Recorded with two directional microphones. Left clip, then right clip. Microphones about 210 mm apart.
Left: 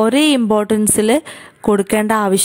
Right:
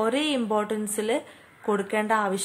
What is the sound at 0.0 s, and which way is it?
Speech, 50° left (ahead or behind).